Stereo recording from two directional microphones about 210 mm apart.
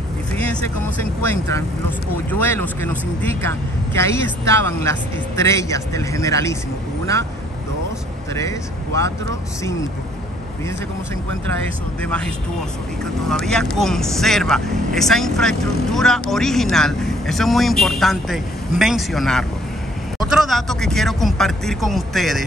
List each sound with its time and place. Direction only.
0.3 s speech: 5° left (ahead or behind)
8.4 s speech: 15° left (ahead or behind)
13.0 s speech: centre (ahead or behind)